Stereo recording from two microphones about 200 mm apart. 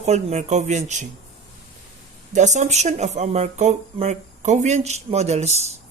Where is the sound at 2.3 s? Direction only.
35° right (ahead or behind).